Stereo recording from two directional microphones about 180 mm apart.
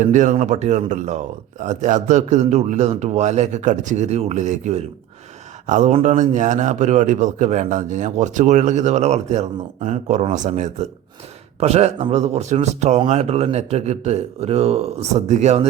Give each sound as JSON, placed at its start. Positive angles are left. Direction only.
{"t": 0.0, "sound": "a man's voice", "side_deg": -45}